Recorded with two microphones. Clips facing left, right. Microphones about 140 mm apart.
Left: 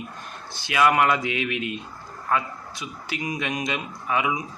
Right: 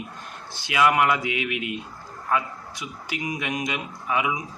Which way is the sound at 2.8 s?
20° right (ahead or behind).